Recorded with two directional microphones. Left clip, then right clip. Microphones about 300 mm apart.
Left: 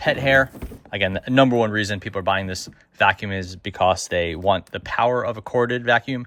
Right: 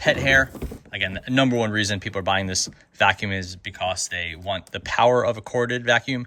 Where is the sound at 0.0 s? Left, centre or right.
Centre.